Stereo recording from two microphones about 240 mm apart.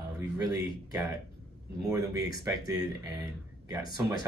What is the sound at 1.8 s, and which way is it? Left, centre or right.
Speech, centre.